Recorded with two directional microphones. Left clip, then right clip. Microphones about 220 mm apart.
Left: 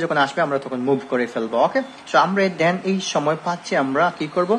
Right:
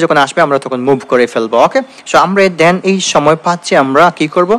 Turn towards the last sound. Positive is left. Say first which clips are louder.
# right 11 dB
turn(degrees=-40)  # may be behind; listen again after turning